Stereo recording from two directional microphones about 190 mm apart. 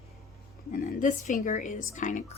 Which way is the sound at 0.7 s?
40° left (ahead or behind).